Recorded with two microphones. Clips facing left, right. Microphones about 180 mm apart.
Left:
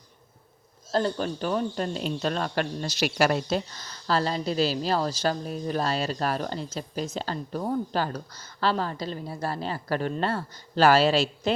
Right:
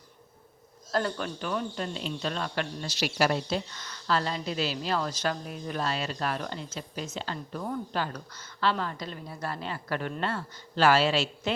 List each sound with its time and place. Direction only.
0.9 s speech: 30° left (ahead or behind); by 3.1 s 45° left (ahead or behind)
3.2 s speech: 55° left (ahead or behind)
3.7 s speech: 35° left (ahead or behind)